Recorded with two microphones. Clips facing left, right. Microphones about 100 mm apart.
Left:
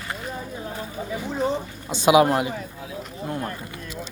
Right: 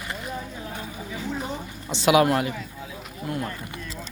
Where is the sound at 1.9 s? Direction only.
20° left (ahead or behind).